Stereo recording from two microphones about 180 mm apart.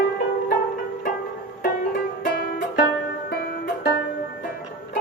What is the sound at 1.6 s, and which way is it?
Music, 50° left (ahead or behind).